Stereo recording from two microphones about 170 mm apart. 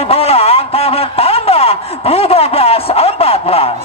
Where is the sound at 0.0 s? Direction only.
35° left (ahead or behind).